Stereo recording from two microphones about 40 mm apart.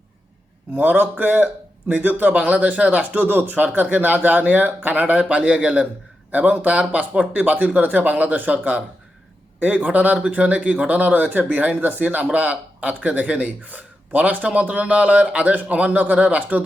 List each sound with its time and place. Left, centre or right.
0.8 s a man's voice: right
3.2 s speech: right
5.3 s a man's voice: right
6.3 s a man's voice: right